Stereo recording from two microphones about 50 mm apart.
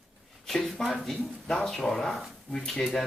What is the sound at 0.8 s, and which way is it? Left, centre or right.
Speech, centre.